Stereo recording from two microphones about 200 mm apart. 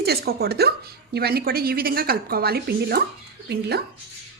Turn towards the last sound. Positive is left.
turn(degrees=-55)  # may be behind; listen again after turning